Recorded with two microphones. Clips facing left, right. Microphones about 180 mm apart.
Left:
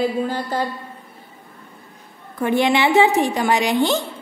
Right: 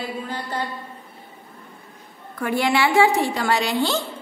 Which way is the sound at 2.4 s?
20° left (ahead or behind).